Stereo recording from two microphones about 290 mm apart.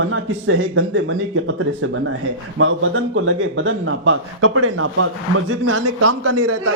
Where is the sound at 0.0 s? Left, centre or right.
Right.